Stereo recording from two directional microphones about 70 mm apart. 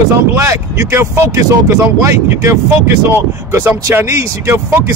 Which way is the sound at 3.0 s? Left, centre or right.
Right.